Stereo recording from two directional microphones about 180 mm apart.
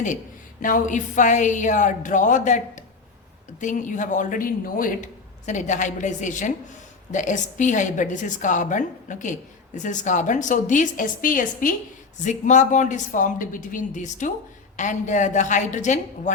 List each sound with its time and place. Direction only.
0.6 s a woman's voice: 45° left (ahead or behind)